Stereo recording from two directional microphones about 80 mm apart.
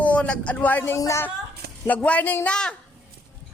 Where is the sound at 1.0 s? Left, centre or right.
Left.